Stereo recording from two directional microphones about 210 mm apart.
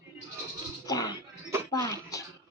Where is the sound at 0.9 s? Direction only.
20° left (ahead or behind).